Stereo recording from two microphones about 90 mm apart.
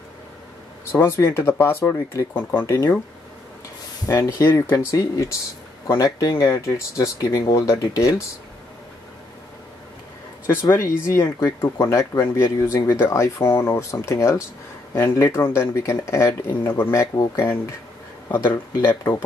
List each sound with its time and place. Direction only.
0.9 s speech: 30° left (ahead or behind)
4.0 s speech: 35° left (ahead or behind)
10.7 s speech: 30° left (ahead or behind)
18.3 s speech: 25° left (ahead or behind)